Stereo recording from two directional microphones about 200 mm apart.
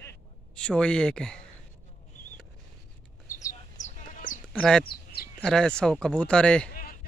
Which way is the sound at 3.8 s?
40° left (ahead or behind).